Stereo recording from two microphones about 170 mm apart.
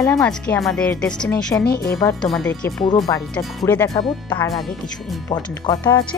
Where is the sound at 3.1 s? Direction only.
15° left (ahead or behind).